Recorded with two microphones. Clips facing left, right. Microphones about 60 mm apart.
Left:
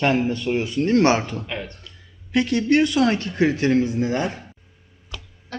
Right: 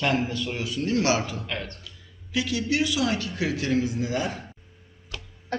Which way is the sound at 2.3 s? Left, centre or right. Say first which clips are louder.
Left 7 dB; left.